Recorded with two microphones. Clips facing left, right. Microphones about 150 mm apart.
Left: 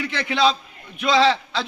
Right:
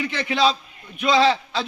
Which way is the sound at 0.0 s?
15° right (ahead or behind).